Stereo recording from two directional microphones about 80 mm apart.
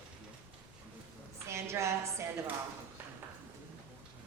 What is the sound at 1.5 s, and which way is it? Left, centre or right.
Speech, right.